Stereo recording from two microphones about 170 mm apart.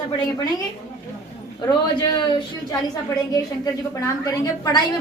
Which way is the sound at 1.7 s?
25° left (ahead or behind).